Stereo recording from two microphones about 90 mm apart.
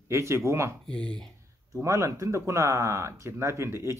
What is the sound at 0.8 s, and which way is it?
Speech, 10° left (ahead or behind).